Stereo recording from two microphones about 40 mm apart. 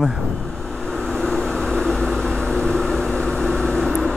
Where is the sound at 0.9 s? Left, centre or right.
Centre.